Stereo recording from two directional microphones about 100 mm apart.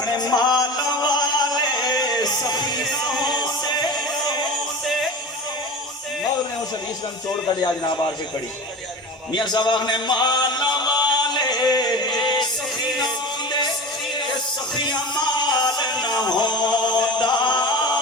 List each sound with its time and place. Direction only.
0.0 s music: 45° left (ahead or behind)
2.9 s music: centre (ahead or behind)
3.4 s music: 45° left (ahead or behind)
9.3 s music: 50° left (ahead or behind)
13.5 s music: 50° left (ahead or behind)
14.8 s music: 50° left (ahead or behind)